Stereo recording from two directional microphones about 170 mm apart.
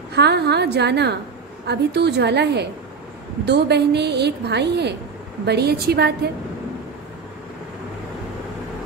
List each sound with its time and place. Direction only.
0.1 s a woman's voice: 75° right (ahead or behind)